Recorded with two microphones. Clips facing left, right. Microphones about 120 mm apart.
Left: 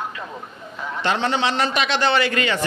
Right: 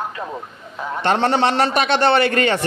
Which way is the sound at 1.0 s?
55° right (ahead or behind).